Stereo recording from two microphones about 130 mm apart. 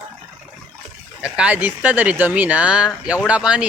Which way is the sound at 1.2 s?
10° right (ahead or behind).